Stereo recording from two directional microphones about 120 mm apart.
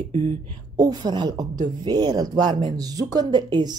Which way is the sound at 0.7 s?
35° right (ahead or behind).